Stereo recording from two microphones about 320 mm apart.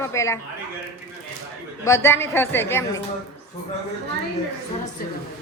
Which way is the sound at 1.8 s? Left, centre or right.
Centre.